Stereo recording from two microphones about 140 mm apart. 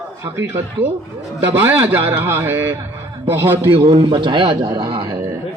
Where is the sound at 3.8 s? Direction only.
40° right (ahead or behind).